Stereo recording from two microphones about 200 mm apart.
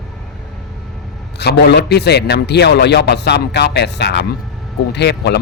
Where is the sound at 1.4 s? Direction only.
55° left (ahead or behind).